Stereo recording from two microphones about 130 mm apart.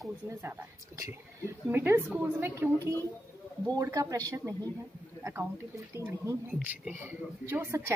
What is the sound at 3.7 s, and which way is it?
A woman's voice, 25° right (ahead or behind).